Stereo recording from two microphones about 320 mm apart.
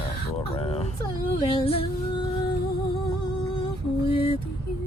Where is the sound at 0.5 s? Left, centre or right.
Centre.